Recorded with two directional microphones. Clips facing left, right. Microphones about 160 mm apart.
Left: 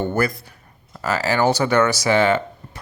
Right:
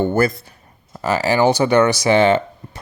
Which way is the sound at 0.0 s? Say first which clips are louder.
Right 4 dB; 25° right (ahead or behind).